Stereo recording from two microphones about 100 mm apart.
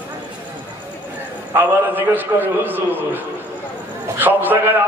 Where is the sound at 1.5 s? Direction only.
20° right (ahead or behind).